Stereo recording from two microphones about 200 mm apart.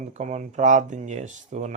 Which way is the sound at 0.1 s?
35° right (ahead or behind).